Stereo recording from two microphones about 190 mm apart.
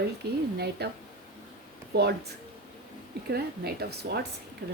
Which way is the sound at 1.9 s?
60° right (ahead or behind).